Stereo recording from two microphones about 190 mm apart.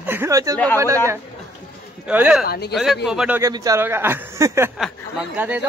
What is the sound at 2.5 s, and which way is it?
Speech, 60° left (ahead or behind).